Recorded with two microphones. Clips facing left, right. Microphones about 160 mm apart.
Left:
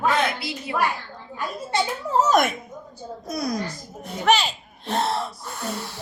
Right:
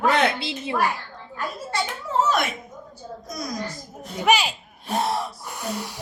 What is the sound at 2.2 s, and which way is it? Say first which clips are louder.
Speech: left 3 dB; 45° left (ahead or behind).